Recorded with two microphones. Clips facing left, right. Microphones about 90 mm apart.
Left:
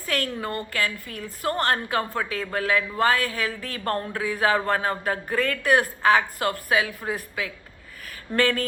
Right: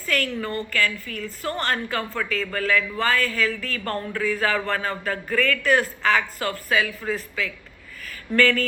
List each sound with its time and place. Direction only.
0.0 s a woman's voice: 20° left (ahead or behind)